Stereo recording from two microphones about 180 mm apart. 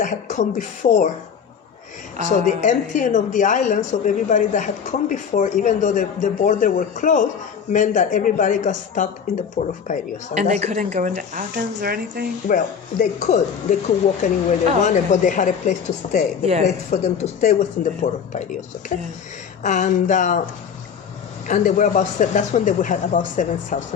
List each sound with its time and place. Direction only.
0.0 s speech: 45° left (ahead or behind)
2.3 s speech: 45° left (ahead or behind)
10.3 s a woman's voice: 40° right (ahead or behind); by 12.3 s 60° right (ahead or behind)
12.5 s speech: 45° left (ahead or behind)
19.6 s speech: 45° left (ahead or behind)
21.4 s speech: 45° left (ahead or behind)